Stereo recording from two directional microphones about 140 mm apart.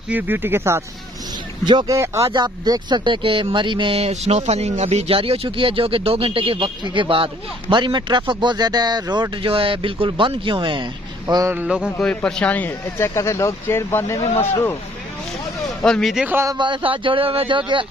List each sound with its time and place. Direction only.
0.1 s speech: 15° right (ahead or behind)
1.6 s speech: 30° right (ahead or behind)
2.0 s speech: 20° right (ahead or behind)
11.5 s speech: 5° right (ahead or behind)
12.0 s speech: 10° left (ahead or behind)
15.8 s a man's voice: 5° left (ahead or behind)
16.3 s speech: 15° right (ahead or behind)
16.5 s speech: 35° right (ahead or behind)